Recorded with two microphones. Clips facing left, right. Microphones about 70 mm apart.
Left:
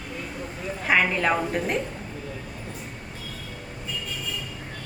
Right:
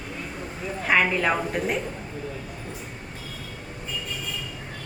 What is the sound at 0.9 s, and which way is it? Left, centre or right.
Speech, centre.